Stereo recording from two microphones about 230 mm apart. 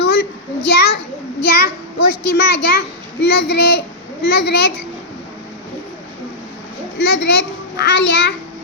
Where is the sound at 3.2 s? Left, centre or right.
Left.